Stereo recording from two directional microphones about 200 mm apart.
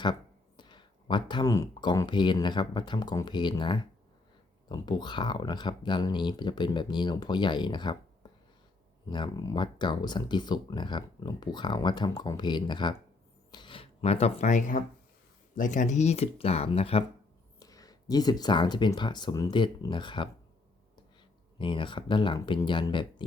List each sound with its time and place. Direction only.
0.0 s speech: 20° left (ahead or behind)
17.6 s speech: 15° left (ahead or behind)
21.6 s speech: 25° left (ahead or behind)